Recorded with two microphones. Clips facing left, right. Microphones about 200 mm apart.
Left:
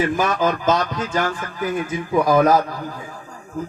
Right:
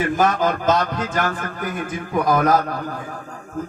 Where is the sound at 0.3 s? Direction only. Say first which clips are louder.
Even; 55° right (ahead or behind).